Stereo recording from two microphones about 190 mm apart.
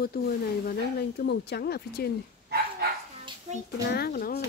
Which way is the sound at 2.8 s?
55° right (ahead or behind).